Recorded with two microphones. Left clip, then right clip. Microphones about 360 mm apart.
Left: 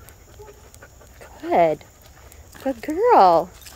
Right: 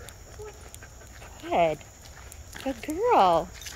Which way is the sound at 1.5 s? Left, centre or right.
Left.